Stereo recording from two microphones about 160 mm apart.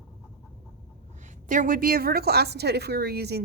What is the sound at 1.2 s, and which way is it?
A woman's voice, 50° right (ahead or behind).